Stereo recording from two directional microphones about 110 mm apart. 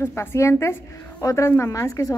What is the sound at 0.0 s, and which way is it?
A woman's voice, 20° left (ahead or behind).